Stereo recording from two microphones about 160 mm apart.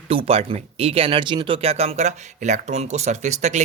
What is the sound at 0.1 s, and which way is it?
Speech, 35° right (ahead or behind).